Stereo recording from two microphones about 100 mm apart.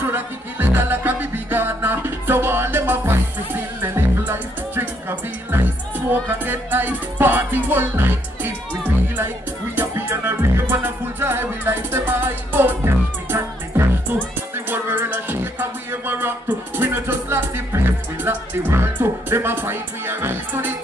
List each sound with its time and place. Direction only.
0.0 s music: 20° right (ahead or behind)
6.2 s music: 20° right (ahead or behind)
9.8 s music: 20° right (ahead or behind)